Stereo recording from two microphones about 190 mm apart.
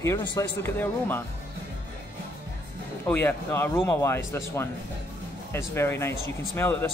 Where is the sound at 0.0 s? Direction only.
15° left (ahead or behind).